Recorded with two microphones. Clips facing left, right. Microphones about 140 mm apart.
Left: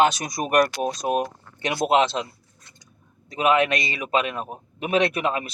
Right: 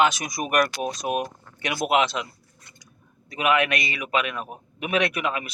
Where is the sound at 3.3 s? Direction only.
30° left (ahead or behind).